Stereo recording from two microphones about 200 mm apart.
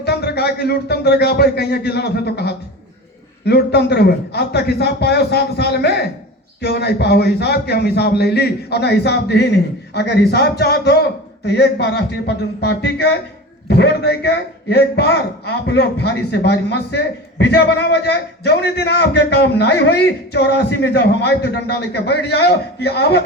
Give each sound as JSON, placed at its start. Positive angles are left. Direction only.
{"t": 0.0, "sound": "a man's voice", "side_deg": 55}